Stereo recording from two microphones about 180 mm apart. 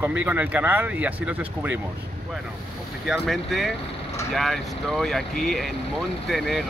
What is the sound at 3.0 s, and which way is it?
Speech, centre (ahead or behind).